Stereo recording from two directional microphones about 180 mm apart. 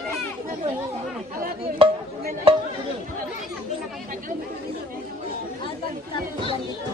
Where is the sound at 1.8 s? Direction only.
30° right (ahead or behind).